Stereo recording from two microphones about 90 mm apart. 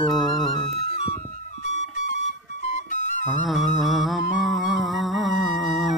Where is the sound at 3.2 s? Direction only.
Centre (ahead or behind).